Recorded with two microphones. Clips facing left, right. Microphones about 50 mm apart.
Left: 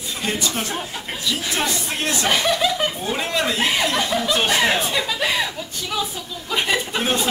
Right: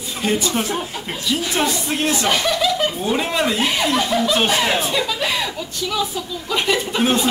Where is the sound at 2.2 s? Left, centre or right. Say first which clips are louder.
Left 2 dB; centre.